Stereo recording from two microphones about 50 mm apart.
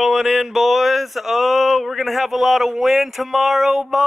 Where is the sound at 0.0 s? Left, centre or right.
Centre.